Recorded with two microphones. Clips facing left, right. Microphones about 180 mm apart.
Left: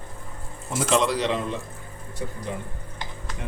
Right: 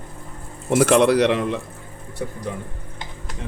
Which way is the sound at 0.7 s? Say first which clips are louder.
Right 8 dB; 70° right (ahead or behind).